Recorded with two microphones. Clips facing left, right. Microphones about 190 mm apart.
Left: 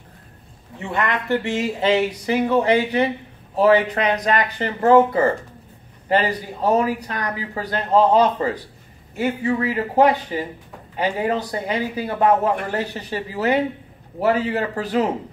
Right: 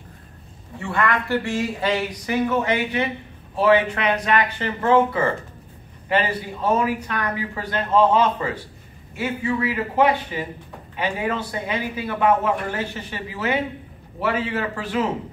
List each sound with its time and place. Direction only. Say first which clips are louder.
0.7 s a man's voice: right 1 dB; 20° left (ahead or behind); by 15.0 s 40° left (ahead or behind)